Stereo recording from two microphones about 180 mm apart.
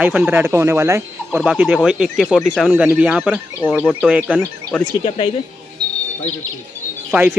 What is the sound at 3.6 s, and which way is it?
Speech, 5° left (ahead or behind).